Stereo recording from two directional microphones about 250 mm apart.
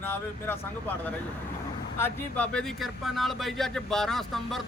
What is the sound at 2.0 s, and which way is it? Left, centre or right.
Speech, centre.